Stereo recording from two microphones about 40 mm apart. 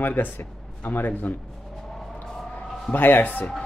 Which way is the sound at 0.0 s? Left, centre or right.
Left.